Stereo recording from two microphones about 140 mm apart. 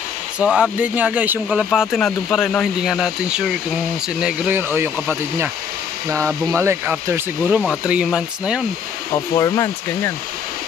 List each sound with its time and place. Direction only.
0.4 s speech: 10° right (ahead or behind)
6.5 s speech: 20° right (ahead or behind)
9.3 s speech: 25° left (ahead or behind)